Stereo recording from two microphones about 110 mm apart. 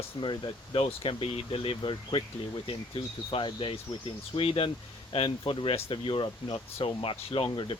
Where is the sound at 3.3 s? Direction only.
50° left (ahead or behind).